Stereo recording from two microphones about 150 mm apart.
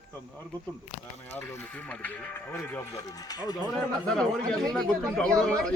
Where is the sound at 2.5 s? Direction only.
25° left (ahead or behind).